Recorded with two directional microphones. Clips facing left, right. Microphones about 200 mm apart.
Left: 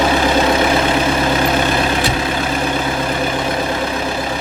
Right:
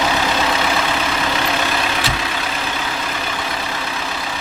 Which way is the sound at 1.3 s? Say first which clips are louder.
Left 5 dB; 50° left (ahead or behind).